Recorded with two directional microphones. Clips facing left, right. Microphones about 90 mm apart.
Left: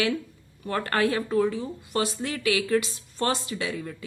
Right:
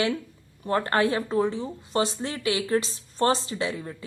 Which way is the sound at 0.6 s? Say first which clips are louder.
Right 2 dB; 30° right (ahead or behind).